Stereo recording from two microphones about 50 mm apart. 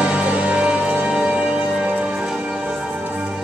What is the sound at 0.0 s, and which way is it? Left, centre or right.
Music, right.